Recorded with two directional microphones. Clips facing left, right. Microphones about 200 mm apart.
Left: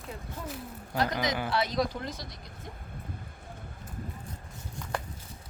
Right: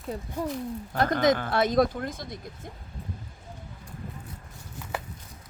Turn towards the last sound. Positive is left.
turn(degrees=-5)  # may be behind; listen again after turning